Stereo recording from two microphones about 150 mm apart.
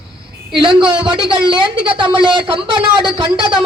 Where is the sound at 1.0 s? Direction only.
35° right (ahead or behind).